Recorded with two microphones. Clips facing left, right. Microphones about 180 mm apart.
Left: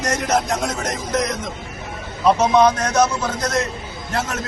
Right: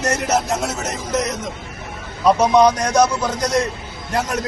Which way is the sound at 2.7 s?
10° right (ahead or behind).